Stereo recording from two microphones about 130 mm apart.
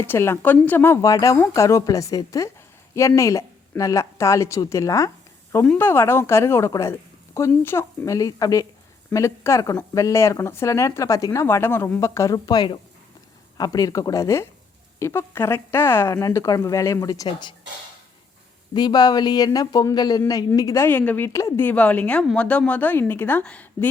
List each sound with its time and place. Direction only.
0.0 s a woman's voice: 20° left (ahead or behind)
18.7 s a woman's voice: 35° left (ahead or behind); by 23.9 s 10° left (ahead or behind)